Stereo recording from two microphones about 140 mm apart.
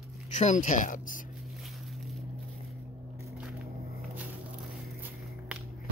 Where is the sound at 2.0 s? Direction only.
Centre (ahead or behind).